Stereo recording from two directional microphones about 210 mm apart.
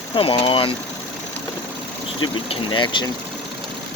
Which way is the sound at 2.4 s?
25° left (ahead or behind).